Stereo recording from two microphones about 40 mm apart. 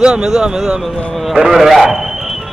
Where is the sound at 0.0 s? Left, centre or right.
Centre.